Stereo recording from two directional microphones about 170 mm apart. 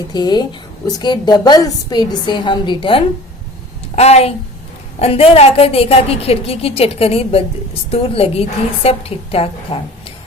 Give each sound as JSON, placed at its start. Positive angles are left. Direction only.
{"t": 0.1, "sound": "a woman's voice", "side_deg": 25}